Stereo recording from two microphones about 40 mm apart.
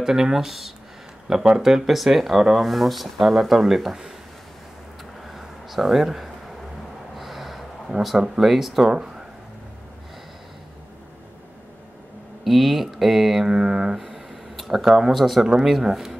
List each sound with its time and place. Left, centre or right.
0.0 s speech: centre
5.3 s a sound: centre
7.2 s gasp: centre
8.0 s speech: centre
12.4 s speech: centre
13.5 s a sound: right
13.9 s a sound: centre
14.9 s speech: centre
15.1 s speech: centre
15.4 s speech: centre